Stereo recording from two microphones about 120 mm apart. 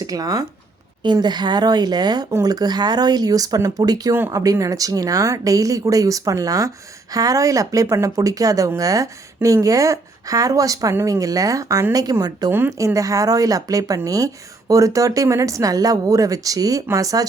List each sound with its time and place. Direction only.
0.0 s speech: 30° right (ahead or behind)